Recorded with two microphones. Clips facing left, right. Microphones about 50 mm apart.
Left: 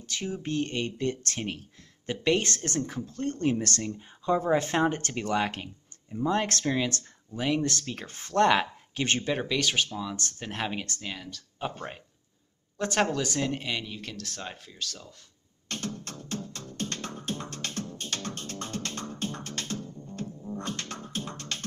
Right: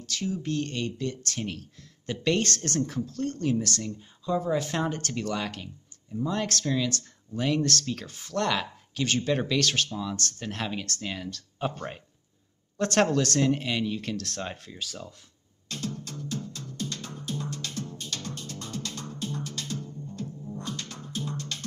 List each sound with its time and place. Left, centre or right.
0.0 s speech: left
1.4 s speech: left
4.7 s speech: left
7.3 s speech: centre
8.1 s speech: left
9.2 s speech: centre
11.0 s speech: centre
12.7 s speech: centre
15.7 s music: left